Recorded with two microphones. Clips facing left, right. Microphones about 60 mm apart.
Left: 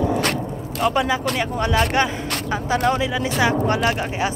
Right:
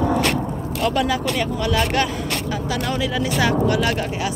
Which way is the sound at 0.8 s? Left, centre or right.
Centre.